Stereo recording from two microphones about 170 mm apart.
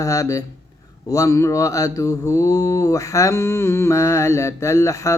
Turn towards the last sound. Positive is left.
turn(degrees=15)  # may be behind; listen again after turning